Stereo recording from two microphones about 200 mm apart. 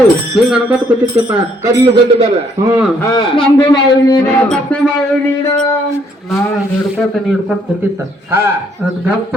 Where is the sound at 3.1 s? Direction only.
25° left (ahead or behind).